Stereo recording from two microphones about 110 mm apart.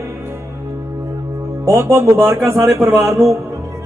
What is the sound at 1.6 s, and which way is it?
Music, 25° right (ahead or behind).